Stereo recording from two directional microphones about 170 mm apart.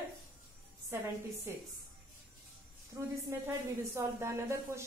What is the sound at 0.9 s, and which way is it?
Speech, 15° right (ahead or behind).